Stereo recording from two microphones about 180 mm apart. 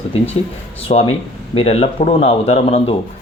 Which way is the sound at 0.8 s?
35° left (ahead or behind).